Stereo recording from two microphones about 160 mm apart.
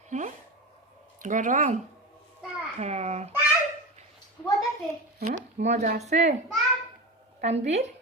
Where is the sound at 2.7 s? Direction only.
45° right (ahead or behind).